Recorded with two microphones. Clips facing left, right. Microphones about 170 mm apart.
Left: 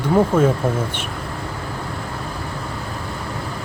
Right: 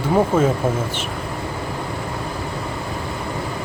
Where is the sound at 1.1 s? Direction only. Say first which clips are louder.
Right 2 dB; 15° right (ahead or behind).